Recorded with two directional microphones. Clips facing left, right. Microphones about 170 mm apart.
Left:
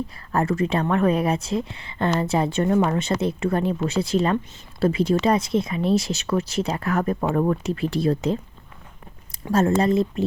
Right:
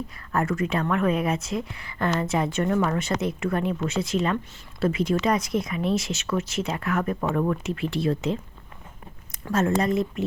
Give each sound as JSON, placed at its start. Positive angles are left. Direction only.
{"t": 0.3, "sound": "speech", "side_deg": 30}
{"t": 9.5, "sound": "speech", "side_deg": 30}